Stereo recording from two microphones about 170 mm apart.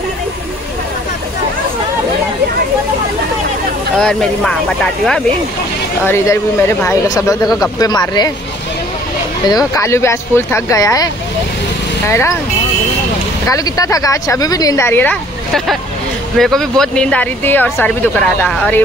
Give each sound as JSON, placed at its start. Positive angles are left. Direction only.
{"t": 4.0, "sound": "speech", "side_deg": 0}
{"t": 6.0, "sound": "speech", "side_deg": 15}
{"t": 9.5, "sound": "speech", "side_deg": 20}
{"t": 12.1, "sound": "speech", "side_deg": 15}
{"t": 13.5, "sound": "speech", "side_deg": 20}